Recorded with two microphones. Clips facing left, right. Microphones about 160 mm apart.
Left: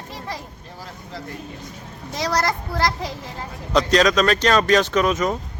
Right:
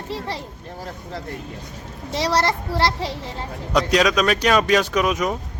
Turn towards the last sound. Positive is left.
turn(degrees=-10)  # may be behind; listen again after turning